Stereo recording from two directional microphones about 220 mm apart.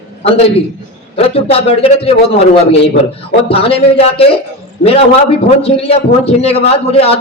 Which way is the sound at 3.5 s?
25° left (ahead or behind).